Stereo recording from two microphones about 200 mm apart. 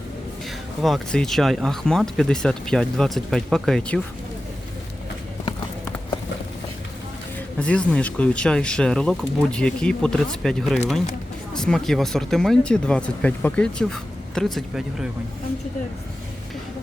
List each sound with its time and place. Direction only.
0.8 s speech: centre (ahead or behind)
7.3 s speech: 5° left (ahead or behind)